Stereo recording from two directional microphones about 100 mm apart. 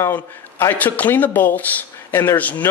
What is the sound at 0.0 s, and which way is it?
A man's voice, 25° left (ahead or behind).